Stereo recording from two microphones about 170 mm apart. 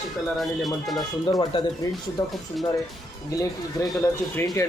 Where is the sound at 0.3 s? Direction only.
Centre (ahead or behind).